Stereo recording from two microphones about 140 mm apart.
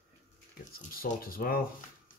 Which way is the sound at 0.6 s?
80° left.